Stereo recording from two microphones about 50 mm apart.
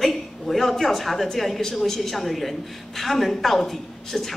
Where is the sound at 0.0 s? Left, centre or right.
Centre.